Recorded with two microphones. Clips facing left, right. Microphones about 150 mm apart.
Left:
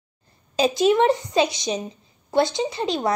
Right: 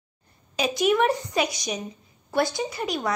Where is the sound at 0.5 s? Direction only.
30° left (ahead or behind).